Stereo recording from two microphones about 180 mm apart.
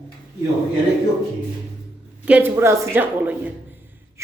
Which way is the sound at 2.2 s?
10° right (ahead or behind).